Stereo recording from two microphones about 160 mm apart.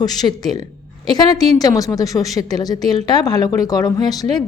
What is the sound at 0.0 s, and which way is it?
A woman's voice, 25° left (ahead or behind).